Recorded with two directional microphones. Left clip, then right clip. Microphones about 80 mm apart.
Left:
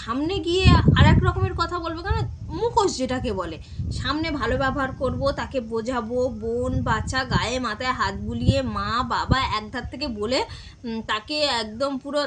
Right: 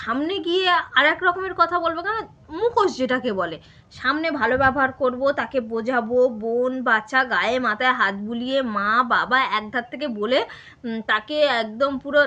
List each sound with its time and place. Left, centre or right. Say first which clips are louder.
0.1 s a woman's voice: right 1 dB; left